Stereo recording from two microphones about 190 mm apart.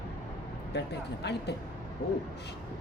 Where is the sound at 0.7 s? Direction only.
60° left (ahead or behind).